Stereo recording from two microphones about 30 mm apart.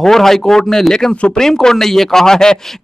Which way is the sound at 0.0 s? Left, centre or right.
Centre.